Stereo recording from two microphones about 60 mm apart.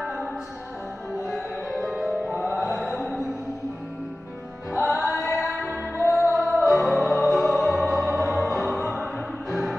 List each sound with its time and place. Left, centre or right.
0.0 s music: centre
1.3 s music: centre
4.6 s music: centre
6.0 s music: left
6.3 s music: centre